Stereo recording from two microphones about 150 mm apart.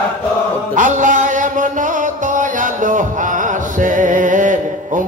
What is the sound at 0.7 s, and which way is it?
Music, 60° right (ahead or behind).